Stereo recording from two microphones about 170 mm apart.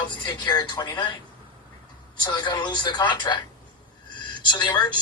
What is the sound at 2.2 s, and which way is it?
Speech, 25° left (ahead or behind).